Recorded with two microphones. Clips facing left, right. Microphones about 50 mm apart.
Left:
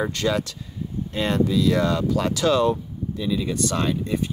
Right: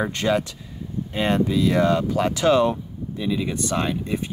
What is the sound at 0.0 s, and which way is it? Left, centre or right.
Speech, right.